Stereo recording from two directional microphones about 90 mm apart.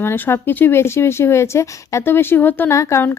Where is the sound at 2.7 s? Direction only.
35° left (ahead or behind).